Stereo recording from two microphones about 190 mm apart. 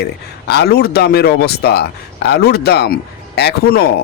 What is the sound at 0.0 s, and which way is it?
Speech, 60° left (ahead or behind).